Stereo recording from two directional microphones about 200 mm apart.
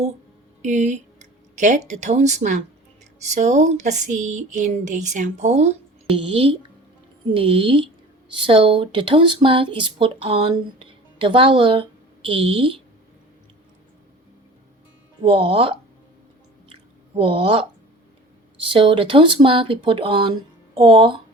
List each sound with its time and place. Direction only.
0.6 s speech: 35° right (ahead or behind)
15.2 s speech: 25° right (ahead or behind)
16.6 s squish: 25° right (ahead or behind)
18.7 s speech: 25° right (ahead or behind)